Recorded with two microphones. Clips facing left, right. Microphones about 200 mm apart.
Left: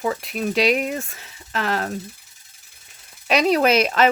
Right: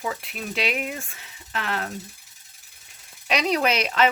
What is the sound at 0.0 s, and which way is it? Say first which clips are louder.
Speech: left 7 dB; 45° left (ahead or behind).